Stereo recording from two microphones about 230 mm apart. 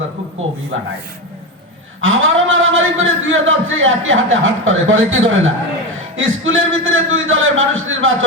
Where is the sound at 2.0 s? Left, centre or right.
Right.